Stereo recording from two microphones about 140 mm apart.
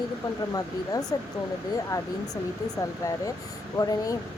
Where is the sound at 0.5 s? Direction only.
25° left (ahead or behind).